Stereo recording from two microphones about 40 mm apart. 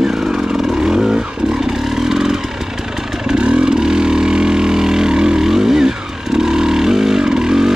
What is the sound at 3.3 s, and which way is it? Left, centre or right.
Vehicle, right.